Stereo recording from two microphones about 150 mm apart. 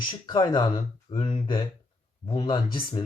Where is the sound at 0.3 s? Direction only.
30° left (ahead or behind).